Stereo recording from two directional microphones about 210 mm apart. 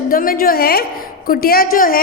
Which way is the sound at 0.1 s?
45° left (ahead or behind).